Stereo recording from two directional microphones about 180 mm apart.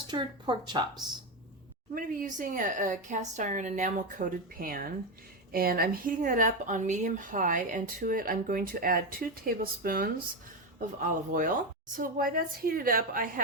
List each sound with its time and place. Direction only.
0.1 s speech: 25° right (ahead or behind)
2.0 s a woman's voice: 50° right (ahead or behind)